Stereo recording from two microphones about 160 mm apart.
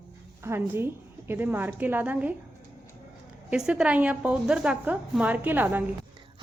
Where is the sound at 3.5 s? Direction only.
5° right (ahead or behind).